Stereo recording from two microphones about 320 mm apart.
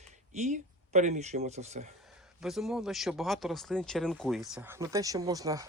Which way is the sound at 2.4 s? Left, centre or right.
Centre.